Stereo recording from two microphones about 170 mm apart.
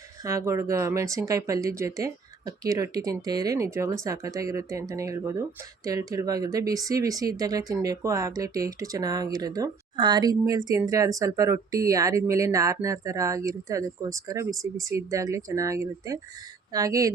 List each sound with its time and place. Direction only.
0.3 s speech: 15° right (ahead or behind)
14.5 s speech: centre (ahead or behind)
14.8 s speech: 20° right (ahead or behind)